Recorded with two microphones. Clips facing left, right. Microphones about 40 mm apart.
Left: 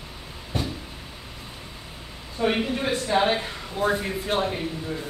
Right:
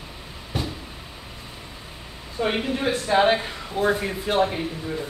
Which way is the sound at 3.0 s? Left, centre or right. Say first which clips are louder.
Right 4 dB; right.